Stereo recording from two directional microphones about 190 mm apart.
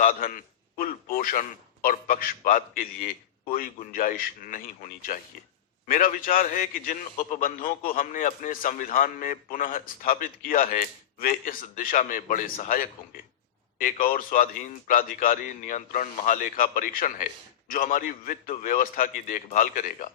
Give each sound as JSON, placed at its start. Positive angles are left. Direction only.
{"t": 0.0, "sound": "a man's voice", "side_deg": 45}